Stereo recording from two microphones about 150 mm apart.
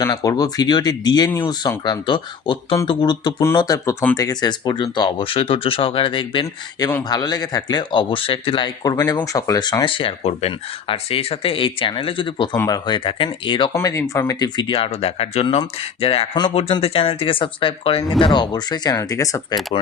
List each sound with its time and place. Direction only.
0.0 s speech: 25° left (ahead or behind)
13.7 s speech: 20° left (ahead or behind)